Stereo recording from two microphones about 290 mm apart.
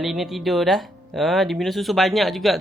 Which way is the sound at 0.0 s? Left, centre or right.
Centre.